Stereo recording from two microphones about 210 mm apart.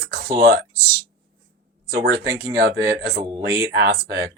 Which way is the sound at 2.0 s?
50° right (ahead or behind).